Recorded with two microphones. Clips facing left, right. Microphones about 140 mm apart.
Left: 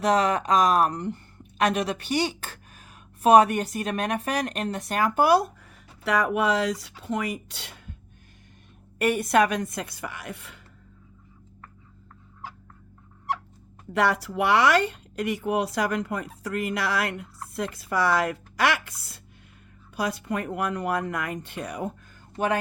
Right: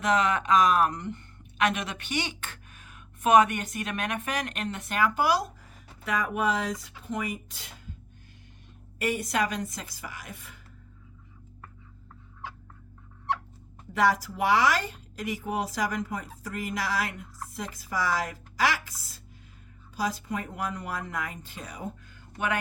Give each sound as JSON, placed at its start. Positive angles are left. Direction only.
{"t": 0.0, "sound": "a woman's voice", "side_deg": 35}
{"t": 6.1, "sound": "speech", "side_deg": 75}
{"t": 9.0, "sound": "speech", "side_deg": 60}
{"t": 13.9, "sound": "speech", "side_deg": 65}